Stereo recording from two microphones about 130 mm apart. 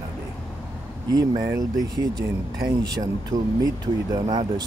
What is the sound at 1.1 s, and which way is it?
Speech, 30° right (ahead or behind).